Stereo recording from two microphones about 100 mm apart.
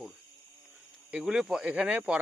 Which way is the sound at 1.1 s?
5° right (ahead or behind).